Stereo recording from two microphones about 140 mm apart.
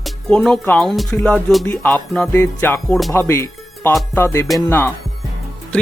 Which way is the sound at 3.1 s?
20° left (ahead or behind).